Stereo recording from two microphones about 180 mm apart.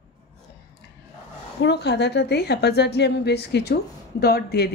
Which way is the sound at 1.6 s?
70° left (ahead or behind).